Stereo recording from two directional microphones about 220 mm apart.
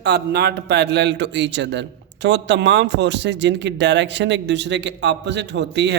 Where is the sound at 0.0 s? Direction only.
50° right (ahead or behind).